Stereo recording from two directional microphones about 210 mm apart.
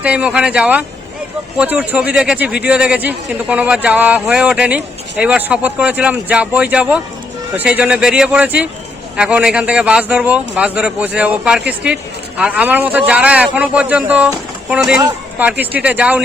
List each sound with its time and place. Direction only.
0.0 s a man's voice: 5° right (ahead or behind)